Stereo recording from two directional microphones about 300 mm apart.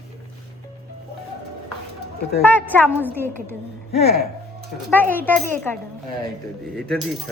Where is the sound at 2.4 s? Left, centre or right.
Centre.